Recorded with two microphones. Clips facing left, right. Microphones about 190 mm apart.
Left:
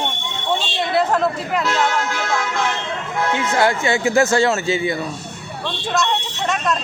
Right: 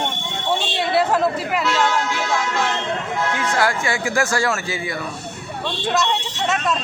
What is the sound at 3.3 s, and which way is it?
A man's voice, 25° left (ahead or behind).